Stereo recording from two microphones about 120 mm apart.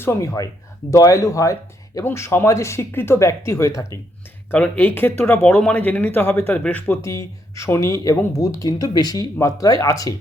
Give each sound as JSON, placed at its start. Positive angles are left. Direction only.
{"t": 0.0, "sound": "speech", "side_deg": 25}
{"t": 4.5, "sound": "speech", "side_deg": 10}
{"t": 7.0, "sound": "speech", "side_deg": 25}